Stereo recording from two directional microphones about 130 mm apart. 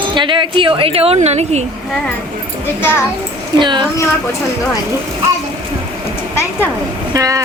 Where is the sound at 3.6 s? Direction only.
35° right (ahead or behind).